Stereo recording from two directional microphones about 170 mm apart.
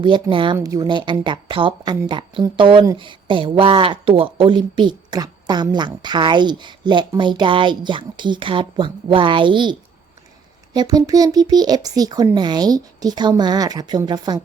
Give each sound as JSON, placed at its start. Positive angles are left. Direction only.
{"t": 0.0, "sound": "a woman's voice", "side_deg": -30}
{"t": 10.8, "sound": "a woman's voice", "side_deg": -20}